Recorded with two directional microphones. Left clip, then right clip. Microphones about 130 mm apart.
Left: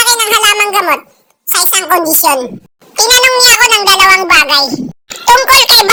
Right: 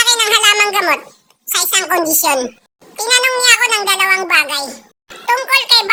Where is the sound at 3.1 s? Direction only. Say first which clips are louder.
Left 4 dB; 30° left (ahead or behind).